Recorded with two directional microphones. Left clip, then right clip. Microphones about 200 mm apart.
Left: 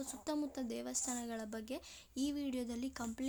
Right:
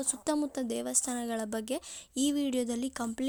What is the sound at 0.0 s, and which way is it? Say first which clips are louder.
A woman's voice: right 9 dB; 40° right (ahead or behind).